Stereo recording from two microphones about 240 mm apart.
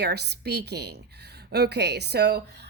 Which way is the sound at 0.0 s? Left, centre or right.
Right.